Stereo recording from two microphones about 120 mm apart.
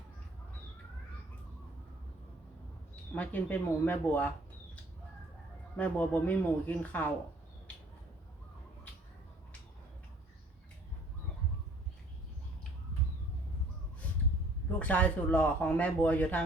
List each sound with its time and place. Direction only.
2.9 s speech: 15° left (ahead or behind)
5.7 s speech: 15° left (ahead or behind)
14.8 s speech: 15° left (ahead or behind)